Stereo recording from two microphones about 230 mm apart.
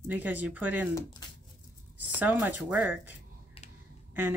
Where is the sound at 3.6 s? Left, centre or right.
Left.